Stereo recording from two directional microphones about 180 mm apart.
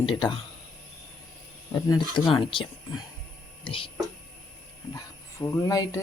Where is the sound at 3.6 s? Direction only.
30° left (ahead or behind).